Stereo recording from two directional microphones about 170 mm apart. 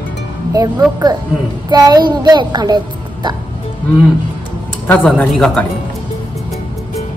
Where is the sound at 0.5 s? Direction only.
20° right (ahead or behind).